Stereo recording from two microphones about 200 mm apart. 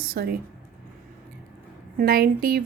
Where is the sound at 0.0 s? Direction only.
50° right (ahead or behind).